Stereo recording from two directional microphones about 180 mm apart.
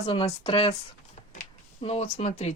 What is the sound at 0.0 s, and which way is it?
Speech, 35° left (ahead or behind).